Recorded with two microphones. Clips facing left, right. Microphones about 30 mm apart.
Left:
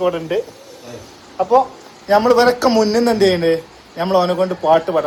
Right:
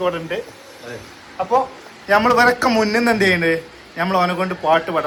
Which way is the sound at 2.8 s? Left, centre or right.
Right.